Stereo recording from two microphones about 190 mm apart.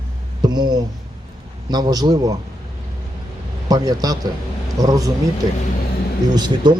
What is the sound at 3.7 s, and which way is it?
Speech, 20° right (ahead or behind).